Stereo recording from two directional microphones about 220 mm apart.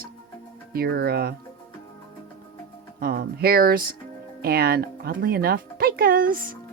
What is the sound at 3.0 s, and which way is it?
Speech, 45° right (ahead or behind).